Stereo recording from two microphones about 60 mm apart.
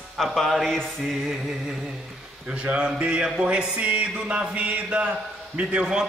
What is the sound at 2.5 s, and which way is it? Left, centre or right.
A man's voice, centre.